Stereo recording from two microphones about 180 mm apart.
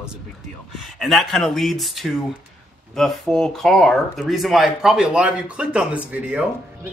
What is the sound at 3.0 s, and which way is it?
Speech, centre (ahead or behind).